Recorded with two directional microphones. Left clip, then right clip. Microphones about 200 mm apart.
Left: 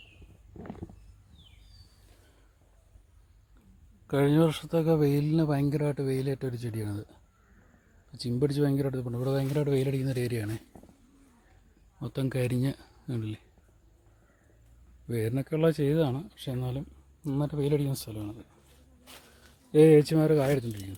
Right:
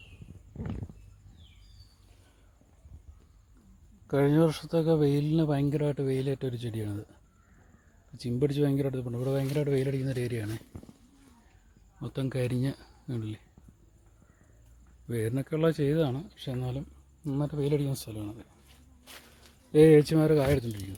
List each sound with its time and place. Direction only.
4.0 s speech: 10° left (ahead or behind)
8.2 s speech: 15° left (ahead or behind)
11.9 s speech: 15° left (ahead or behind)
15.0 s speech: 10° left (ahead or behind)
19.1 s speech: centre (ahead or behind)